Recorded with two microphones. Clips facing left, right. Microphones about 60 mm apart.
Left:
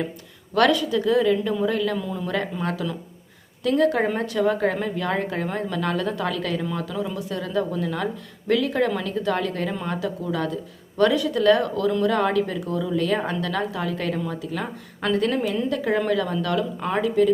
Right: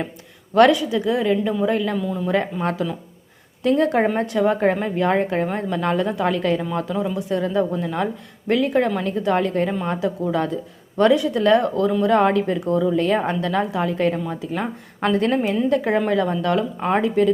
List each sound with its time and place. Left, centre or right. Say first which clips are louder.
0.5 s a woman's voice: right 4 dB; right
2.0 s speech: right 4 dB; centre
2.3 s a woman's voice: right 4 dB; right